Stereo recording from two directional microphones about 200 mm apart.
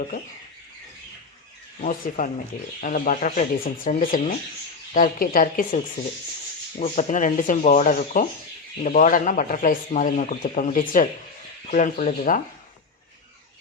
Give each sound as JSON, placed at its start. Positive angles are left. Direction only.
{"t": 1.8, "sound": "speech", "side_deg": 40}